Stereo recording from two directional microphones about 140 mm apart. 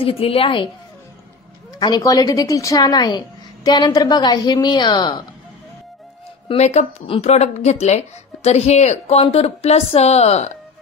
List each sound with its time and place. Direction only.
0.0 s speech: 40° left (ahead or behind)
1.8 s a woman's voice: 25° left (ahead or behind)
6.5 s speech: 50° left (ahead or behind)